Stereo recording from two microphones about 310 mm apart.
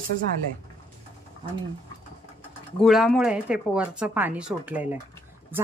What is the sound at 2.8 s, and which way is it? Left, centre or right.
Speech, centre.